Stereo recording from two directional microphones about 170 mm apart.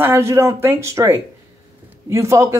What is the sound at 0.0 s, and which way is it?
Speech, 15° right (ahead or behind).